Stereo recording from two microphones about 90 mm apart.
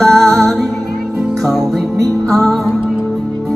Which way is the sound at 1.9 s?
40° right (ahead or behind).